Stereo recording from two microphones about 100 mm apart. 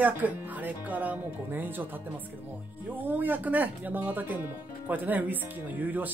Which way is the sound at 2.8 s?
20° right (ahead or behind).